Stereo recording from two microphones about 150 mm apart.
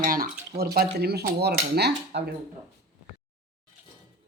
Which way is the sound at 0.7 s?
90° right.